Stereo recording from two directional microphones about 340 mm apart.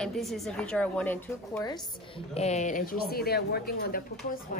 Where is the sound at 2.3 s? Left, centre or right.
Centre.